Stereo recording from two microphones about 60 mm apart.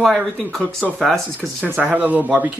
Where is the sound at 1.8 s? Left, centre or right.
Right.